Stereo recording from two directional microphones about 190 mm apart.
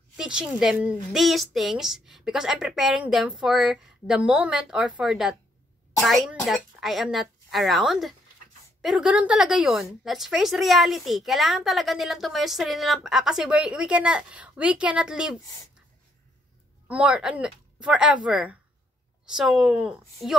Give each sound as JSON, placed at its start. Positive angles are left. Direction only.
{"t": 0.2, "sound": "a woman's voice", "side_deg": -5}
{"t": 16.8, "sound": "a woman's voice", "side_deg": -5}